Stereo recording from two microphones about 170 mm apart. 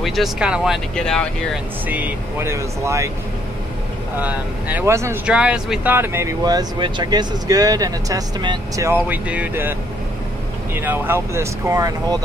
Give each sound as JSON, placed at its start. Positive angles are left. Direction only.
{"t": 0.0, "sound": "speech", "side_deg": 0}
{"t": 1.9, "sound": "speech", "side_deg": -10}
{"t": 4.2, "sound": "speech", "side_deg": -10}
{"t": 8.8, "sound": "speech", "side_deg": -10}